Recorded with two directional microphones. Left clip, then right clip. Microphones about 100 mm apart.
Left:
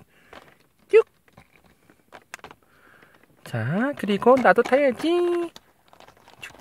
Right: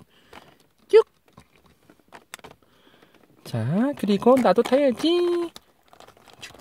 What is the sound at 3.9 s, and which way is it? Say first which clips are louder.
Speech: left 1 dB; 20° right (ahead or behind).